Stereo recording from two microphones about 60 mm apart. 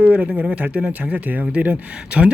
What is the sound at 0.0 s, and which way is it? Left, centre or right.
Speech, right.